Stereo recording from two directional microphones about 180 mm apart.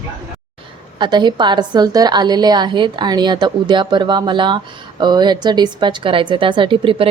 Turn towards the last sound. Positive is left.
turn(degrees=-30)  # may be behind; listen again after turning